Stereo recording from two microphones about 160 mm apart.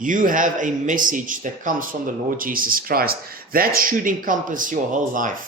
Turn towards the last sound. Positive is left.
turn(degrees=-55)  # may be behind; listen again after turning